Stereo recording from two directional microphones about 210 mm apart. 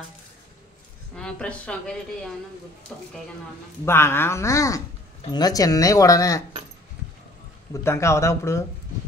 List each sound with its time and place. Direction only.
1.1 s a woman's voice: 5° left (ahead or behind)
7.7 s speech: 15° left (ahead or behind)